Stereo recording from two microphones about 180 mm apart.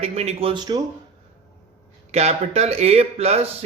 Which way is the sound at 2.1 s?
35° right (ahead or behind).